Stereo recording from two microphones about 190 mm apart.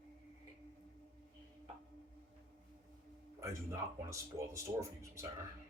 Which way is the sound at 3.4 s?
15° right (ahead or behind).